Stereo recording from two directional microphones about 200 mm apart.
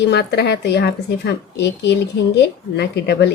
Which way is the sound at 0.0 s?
55° left (ahead or behind).